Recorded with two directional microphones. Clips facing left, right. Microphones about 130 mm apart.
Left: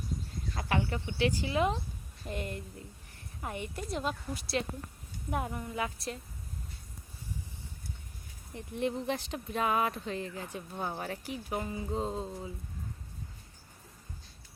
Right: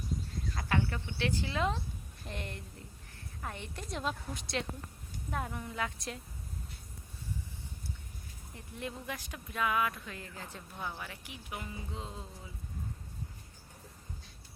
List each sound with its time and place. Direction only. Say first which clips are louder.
0.5 s a woman's voice: left 2 dB; 20° left (ahead or behind)
8.5 s speech: left 9 dB; 20° left (ahead or behind)
10.8 s speech: left 5 dB; 40° left (ahead or behind)